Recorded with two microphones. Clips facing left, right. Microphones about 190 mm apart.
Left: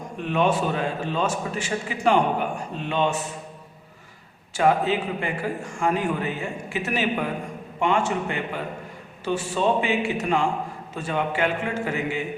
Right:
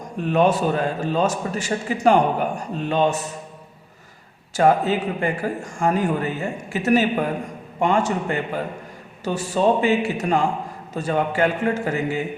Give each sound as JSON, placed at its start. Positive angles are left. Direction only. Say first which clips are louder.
{"t": 0.2, "sound": "a man's voice", "louder": "right 4 dB", "side_deg": -40}
{"t": 4.5, "sound": "a man's voice", "louder": "right 3 dB", "side_deg": -40}